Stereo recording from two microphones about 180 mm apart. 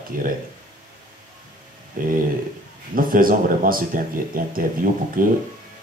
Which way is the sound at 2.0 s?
50° right (ahead or behind).